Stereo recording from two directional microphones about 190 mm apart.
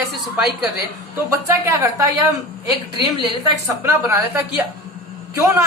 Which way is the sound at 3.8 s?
15° right (ahead or behind).